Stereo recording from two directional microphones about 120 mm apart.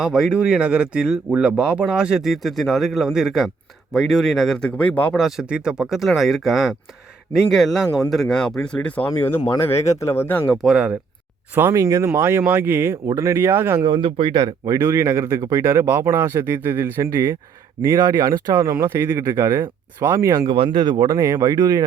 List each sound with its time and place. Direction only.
0.0 s speech: 5° right (ahead or behind); by 5.2 s 10° left (ahead or behind)
5.2 s speech: 5° right (ahead or behind); by 10.4 s 20° left (ahead or behind)
10.5 s speech: centre (ahead or behind)
11.5 s speech: 20° right (ahead or behind)
13.8 s speech: 45° right (ahead or behind)
14.7 s speech: 25° right (ahead or behind)
20.5 s speech: 40° right (ahead or behind)